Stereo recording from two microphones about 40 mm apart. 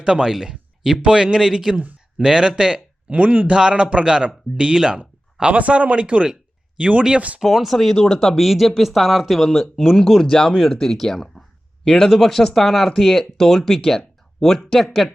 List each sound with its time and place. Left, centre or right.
0.0 s speech: right
3.1 s speech: right
3.6 s speech: right
4.9 s speech: right
7.3 s speech: centre
8.4 s speech: centre
10.0 s speech: centre